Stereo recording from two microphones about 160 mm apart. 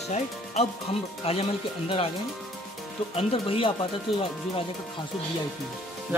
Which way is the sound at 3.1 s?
35° left (ahead or behind).